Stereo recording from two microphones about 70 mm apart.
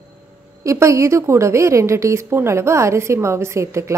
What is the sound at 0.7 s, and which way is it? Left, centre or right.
A woman's voice, right.